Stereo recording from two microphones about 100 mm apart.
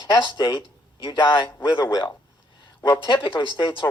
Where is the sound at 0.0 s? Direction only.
45° left (ahead or behind).